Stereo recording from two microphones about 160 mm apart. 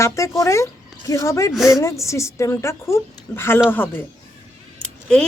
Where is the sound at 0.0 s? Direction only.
20° left (ahead or behind).